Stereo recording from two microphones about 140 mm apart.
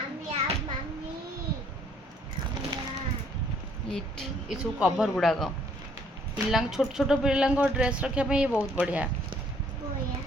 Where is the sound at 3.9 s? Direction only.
Centre (ahead or behind).